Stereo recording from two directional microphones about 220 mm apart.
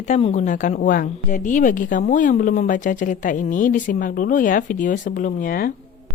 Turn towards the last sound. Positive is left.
turn(degrees=40)  # may be behind; listen again after turning